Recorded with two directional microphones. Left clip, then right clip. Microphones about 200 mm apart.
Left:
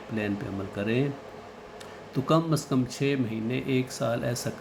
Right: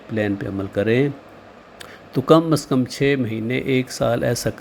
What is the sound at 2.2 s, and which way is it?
Speech, 35° right (ahead or behind).